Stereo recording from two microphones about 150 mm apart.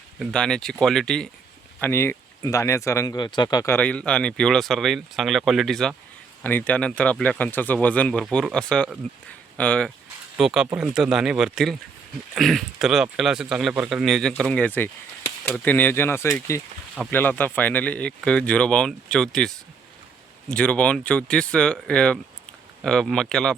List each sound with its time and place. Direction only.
0.2 s speech: 5° left (ahead or behind)
1.8 s speech: 15° left (ahead or behind)
3.8 s speech: 10° left (ahead or behind)
10.3 s speech: 5° right (ahead or behind)